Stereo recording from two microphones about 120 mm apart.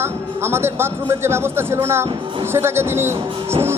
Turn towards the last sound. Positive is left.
turn(degrees=-20)  # may be behind; listen again after turning